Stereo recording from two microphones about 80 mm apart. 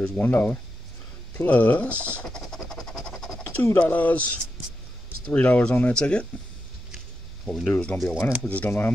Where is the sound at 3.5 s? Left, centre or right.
Left.